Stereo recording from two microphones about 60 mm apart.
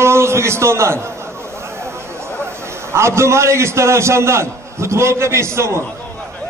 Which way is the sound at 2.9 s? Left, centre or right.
Right.